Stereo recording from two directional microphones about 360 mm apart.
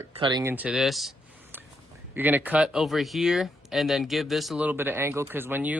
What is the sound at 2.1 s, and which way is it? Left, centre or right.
Speech, centre.